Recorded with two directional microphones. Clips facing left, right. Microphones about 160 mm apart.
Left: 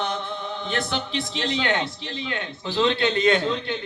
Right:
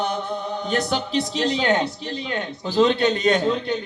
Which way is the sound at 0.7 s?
40° right (ahead or behind).